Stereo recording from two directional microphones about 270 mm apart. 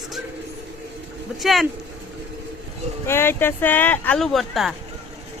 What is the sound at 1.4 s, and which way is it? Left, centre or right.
Speech, centre.